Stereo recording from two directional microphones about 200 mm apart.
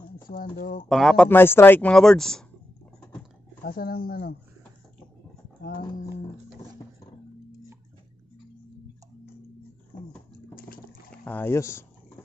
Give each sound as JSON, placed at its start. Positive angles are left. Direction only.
{"t": 0.3, "sound": "speech", "side_deg": 45}
{"t": 0.8, "sound": "speech", "side_deg": 0}
{"t": 3.6, "sound": "speech", "side_deg": 50}
{"t": 11.2, "sound": "speech", "side_deg": 10}